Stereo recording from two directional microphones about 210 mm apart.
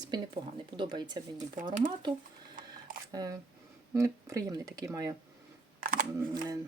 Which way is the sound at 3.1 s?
20° right (ahead or behind).